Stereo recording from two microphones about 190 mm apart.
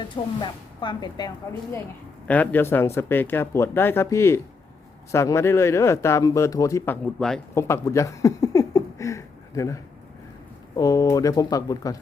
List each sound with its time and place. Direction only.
0.0 s speech: 25° left (ahead or behind)
2.2 s speech: 10° left (ahead or behind)
7.5 s speech: 15° left (ahead or behind)